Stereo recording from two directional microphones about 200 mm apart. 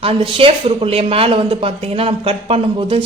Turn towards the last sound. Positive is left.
turn(degrees=-30)  # may be behind; listen again after turning